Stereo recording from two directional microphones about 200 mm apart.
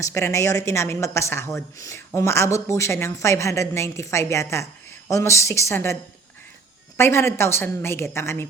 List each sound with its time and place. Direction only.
0.0 s a woman's voice: 15° left (ahead or behind)